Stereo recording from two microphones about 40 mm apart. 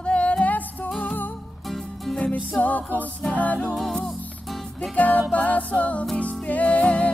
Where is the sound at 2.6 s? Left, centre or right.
Left.